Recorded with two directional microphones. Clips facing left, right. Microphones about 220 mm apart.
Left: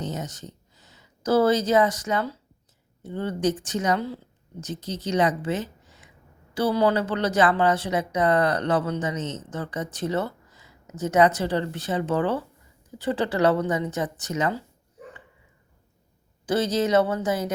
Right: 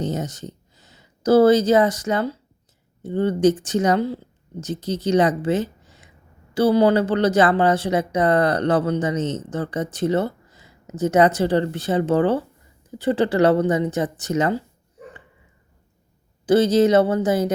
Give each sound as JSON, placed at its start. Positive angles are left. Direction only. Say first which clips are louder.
{"t": 0.0, "sound": "a sound", "louder": "right 6 dB", "side_deg": -30}
{"t": 1.2, "sound": "speech", "louder": "right 6 dB", "side_deg": -30}
{"t": 16.5, "sound": "speech", "louder": "right 7 dB", "side_deg": -30}